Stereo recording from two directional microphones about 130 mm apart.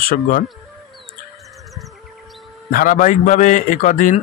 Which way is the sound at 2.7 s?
90° left.